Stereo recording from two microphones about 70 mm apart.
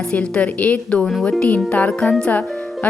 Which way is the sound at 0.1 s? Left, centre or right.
Centre.